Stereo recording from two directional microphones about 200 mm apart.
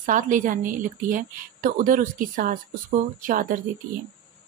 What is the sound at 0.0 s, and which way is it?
A woman's voice, 40° right (ahead or behind).